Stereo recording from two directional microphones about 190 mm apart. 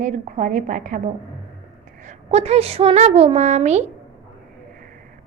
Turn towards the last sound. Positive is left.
turn(degrees=-35)  # may be behind; listen again after turning